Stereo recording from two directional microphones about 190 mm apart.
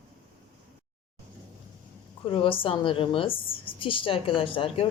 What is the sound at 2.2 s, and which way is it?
A woman's voice, 30° left (ahead or behind).